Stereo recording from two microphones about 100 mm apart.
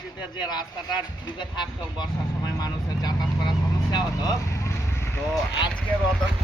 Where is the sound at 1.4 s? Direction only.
45° left (ahead or behind); by 5.2 s 25° left (ahead or behind).